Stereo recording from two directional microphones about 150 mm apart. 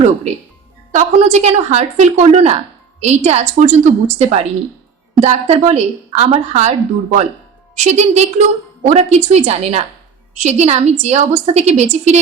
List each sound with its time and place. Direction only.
0.9 s a woman's voice: 50° right (ahead or behind)